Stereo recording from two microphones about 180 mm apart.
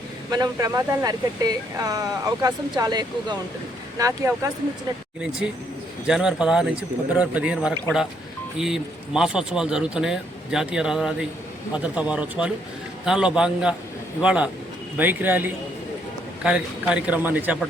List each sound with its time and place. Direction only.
0.3 s a man's voice: 20° right (ahead or behind)
6.1 s a man's voice: 5° right (ahead or behind)